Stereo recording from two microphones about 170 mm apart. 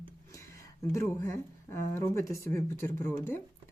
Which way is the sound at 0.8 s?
15° left (ahead or behind).